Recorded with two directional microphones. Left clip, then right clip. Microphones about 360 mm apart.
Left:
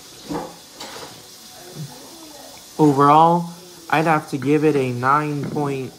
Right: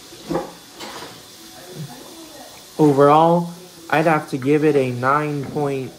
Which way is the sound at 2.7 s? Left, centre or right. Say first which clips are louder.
Even; centre.